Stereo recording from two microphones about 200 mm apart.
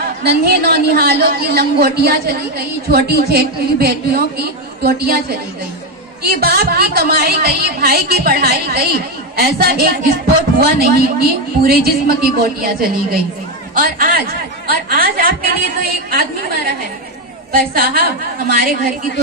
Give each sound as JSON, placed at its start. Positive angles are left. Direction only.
{"t": 0.2, "sound": "a woman's voice", "side_deg": -55}
{"t": 6.2, "sound": "a woman's voice", "side_deg": -50}